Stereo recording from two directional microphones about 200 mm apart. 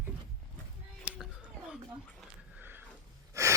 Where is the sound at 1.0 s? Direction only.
5° right (ahead or behind).